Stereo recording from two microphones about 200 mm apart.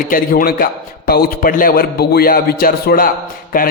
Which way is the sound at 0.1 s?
45° left (ahead or behind).